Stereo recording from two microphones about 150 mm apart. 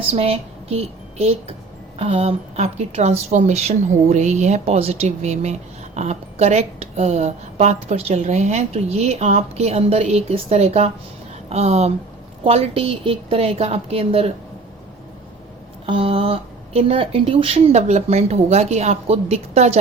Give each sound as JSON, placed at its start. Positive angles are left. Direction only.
{"t": 0.1, "sound": "a woman's voice", "side_deg": -40}
{"t": 15.9, "sound": "a woman's voice", "side_deg": -40}